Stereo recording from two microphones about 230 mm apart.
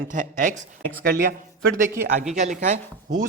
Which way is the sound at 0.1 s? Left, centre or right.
Right.